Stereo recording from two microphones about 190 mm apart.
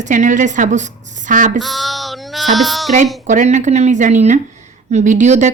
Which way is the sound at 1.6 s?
Centre (ahead or behind).